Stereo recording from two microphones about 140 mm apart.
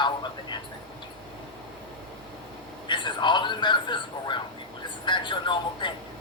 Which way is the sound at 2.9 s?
35° left (ahead or behind).